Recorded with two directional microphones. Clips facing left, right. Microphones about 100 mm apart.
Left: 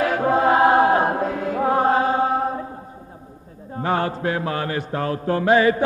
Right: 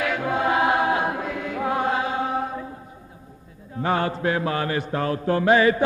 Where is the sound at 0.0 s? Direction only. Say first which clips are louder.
Left 5 dB; 40° left (ahead or behind).